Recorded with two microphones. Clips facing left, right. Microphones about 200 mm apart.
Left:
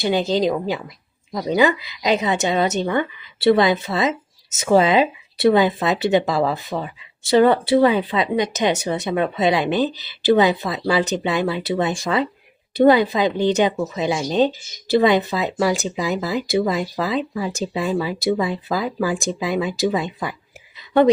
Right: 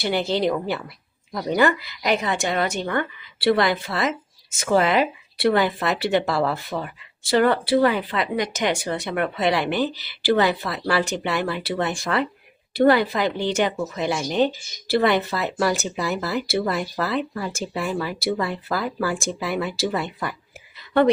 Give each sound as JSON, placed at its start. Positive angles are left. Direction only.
{"t": 0.0, "sound": "speech", "side_deg": 15}